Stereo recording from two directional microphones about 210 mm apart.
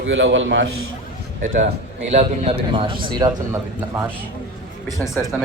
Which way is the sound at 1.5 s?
40° right (ahead or behind).